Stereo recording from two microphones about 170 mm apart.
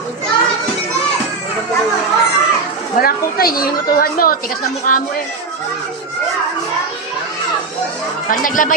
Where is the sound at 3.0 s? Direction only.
60° left (ahead or behind).